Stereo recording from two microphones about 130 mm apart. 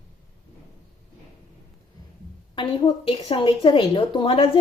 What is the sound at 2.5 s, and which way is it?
A woman's voice, 35° left (ahead or behind).